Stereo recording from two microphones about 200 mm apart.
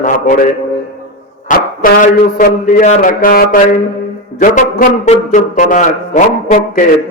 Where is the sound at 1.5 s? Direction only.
45° left (ahead or behind).